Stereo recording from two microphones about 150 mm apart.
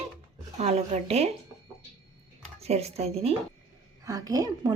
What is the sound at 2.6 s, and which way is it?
Speech, 45° right (ahead or behind).